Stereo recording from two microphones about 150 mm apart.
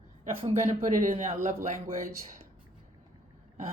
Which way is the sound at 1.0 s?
60° right (ahead or behind).